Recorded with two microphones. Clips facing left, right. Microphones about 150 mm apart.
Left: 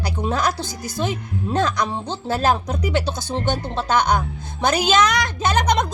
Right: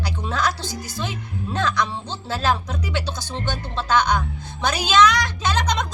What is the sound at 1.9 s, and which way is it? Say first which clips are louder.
Speech: left 4 dB; 20° left (ahead or behind).